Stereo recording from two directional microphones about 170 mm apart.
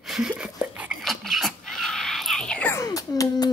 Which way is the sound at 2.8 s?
20° left (ahead or behind).